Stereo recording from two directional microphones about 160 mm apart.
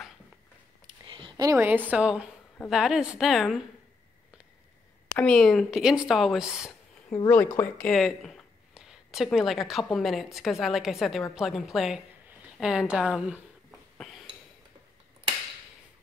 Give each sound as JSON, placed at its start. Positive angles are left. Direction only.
{"t": 0.8, "sound": "speech", "side_deg": -30}
{"t": 5.1, "sound": "speech", "side_deg": 5}
{"t": 7.2, "sound": "a woman's voice", "side_deg": 10}
{"t": 13.9, "sound": "a sound", "side_deg": 0}